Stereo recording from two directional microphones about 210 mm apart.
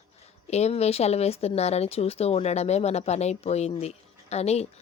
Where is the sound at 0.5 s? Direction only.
30° left (ahead or behind).